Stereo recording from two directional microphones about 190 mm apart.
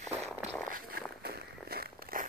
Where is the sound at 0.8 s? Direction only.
50° right (ahead or behind).